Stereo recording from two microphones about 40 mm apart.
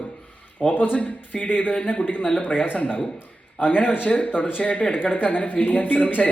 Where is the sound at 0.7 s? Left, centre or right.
Left.